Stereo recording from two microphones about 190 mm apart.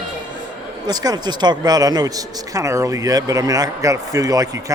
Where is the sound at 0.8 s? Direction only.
20° right (ahead or behind).